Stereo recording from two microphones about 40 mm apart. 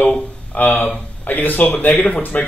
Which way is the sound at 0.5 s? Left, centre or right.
Left.